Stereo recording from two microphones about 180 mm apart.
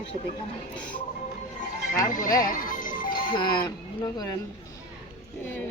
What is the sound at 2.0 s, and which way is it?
Speech, 45° left (ahead or behind).